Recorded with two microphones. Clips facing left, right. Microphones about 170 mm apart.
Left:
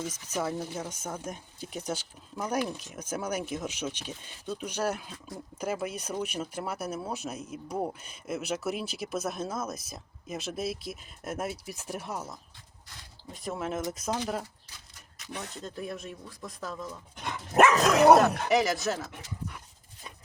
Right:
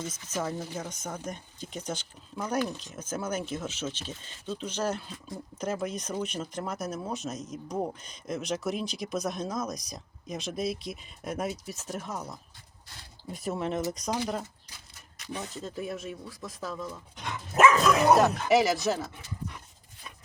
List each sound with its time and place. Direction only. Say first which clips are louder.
0.0 s speech: left 1 dB; 10° left (ahead or behind)
13.3 s speech: right 2 dB; 5° right (ahead or behind)
15.4 s speech: right 1 dB; 5° right (ahead or behind)
17.6 s speech: left 1 dB; 65° left (ahead or behind)
18.4 s speech: right 2 dB; centre (ahead or behind)